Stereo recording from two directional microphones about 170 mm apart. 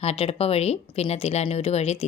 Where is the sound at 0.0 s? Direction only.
35° left (ahead or behind).